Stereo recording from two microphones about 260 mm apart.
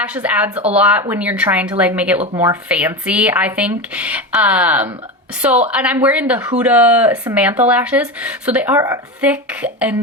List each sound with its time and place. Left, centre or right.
0.0 s speech: centre